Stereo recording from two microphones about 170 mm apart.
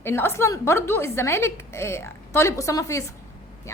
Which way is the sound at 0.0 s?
15° left (ahead or behind).